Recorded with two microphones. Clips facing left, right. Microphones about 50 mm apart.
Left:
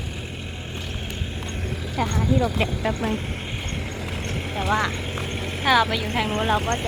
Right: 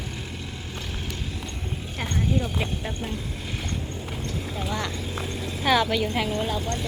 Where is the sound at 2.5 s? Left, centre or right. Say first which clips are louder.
Left 6 dB; left.